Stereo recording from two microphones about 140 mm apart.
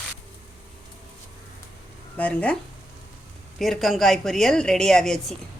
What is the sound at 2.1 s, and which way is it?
Speech, 10° left (ahead or behind).